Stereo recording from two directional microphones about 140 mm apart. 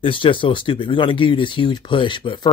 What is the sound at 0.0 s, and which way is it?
Speech, 40° left (ahead or behind).